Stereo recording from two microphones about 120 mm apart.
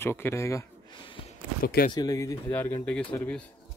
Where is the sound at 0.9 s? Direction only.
45° left (ahead or behind).